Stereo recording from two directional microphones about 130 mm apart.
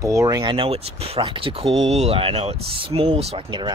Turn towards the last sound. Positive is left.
turn(degrees=-50)  # may be behind; listen again after turning